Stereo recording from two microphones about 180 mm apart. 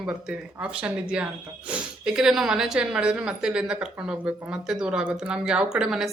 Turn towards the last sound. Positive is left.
turn(degrees=0)  # may be behind; listen again after turning